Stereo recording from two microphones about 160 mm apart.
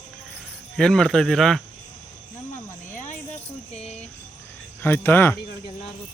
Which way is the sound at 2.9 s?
50° left (ahead or behind).